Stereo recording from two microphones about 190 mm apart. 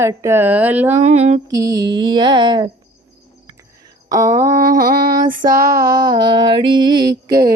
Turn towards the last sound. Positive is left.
turn(degrees=-20)  # may be behind; listen again after turning